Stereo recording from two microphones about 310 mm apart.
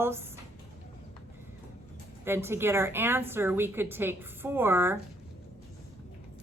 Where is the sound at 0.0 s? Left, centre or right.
Centre.